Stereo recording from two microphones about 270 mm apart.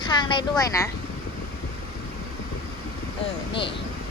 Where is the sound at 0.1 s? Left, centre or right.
Centre.